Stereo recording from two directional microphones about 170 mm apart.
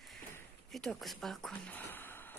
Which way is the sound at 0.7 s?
Centre (ahead or behind).